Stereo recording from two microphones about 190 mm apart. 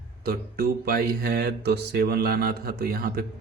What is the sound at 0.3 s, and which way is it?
Mantra, 50° right (ahead or behind).